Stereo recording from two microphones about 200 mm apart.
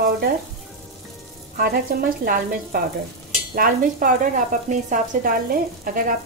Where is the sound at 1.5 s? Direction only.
45° right (ahead or behind).